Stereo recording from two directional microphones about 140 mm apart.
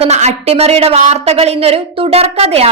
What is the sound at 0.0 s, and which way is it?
A woman's voice, 50° right (ahead or behind).